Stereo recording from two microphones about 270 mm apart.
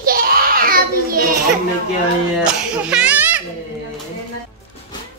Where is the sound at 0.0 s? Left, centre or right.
Right.